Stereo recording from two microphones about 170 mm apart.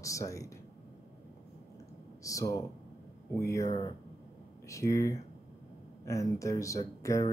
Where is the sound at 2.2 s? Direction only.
20° left (ahead or behind).